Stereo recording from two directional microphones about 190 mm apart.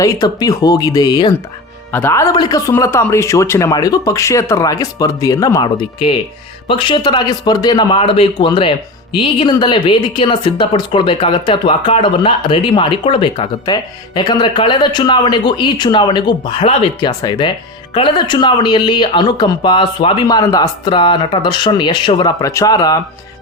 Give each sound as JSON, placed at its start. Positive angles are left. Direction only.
{"t": 0.0, "sound": "speech", "side_deg": 20}